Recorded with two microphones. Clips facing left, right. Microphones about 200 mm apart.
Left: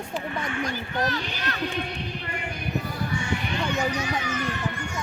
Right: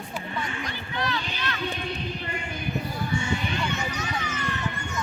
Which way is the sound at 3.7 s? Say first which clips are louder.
Left 5 dB; 10° left (ahead or behind).